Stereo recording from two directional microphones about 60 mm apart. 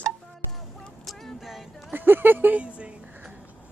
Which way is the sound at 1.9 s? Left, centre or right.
Right.